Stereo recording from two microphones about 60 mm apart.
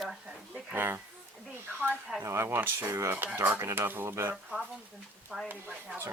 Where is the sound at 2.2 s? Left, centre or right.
Right.